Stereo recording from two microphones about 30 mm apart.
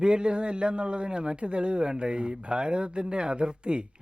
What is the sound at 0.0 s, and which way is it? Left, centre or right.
A man's voice, right.